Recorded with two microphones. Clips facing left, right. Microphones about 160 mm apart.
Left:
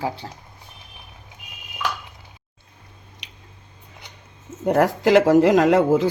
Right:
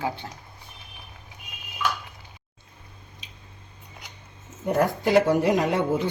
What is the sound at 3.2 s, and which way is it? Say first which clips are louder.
Squish: left 1 dB; 75° left (ahead or behind).